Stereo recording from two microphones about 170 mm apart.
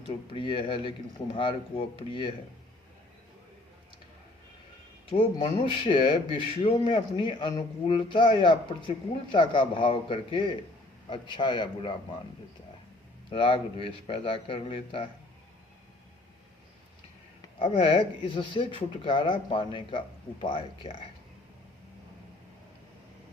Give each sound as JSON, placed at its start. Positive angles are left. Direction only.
{"t": 0.3, "sound": "a man's voice", "side_deg": 30}
{"t": 5.1, "sound": "a man's voice", "side_deg": 30}
{"t": 13.3, "sound": "a man's voice", "side_deg": 30}
{"t": 17.6, "sound": "a man's voice", "side_deg": 30}